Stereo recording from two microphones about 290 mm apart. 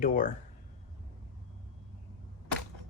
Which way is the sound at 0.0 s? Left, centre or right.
Left.